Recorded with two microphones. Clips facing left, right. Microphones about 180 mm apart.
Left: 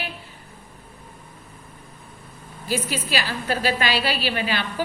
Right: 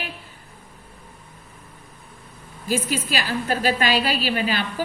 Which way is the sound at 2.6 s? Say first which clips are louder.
Right 2 dB; 45° right (ahead or behind).